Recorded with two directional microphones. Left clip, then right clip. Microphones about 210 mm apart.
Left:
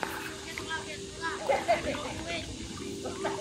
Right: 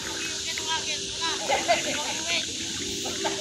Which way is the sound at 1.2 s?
45° left (ahead or behind).